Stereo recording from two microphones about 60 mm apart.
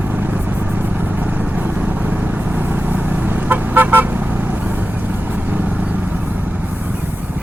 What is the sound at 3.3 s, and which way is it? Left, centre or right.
Vehicle, right.